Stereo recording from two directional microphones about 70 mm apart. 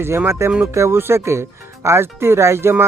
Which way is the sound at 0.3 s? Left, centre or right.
Right.